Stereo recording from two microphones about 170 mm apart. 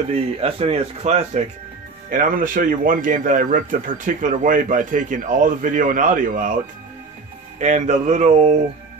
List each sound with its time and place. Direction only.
0.1 s speech: 35° right (ahead or behind)
2.0 s speech: 55° right (ahead or behind)
7.5 s speech: 45° right (ahead or behind)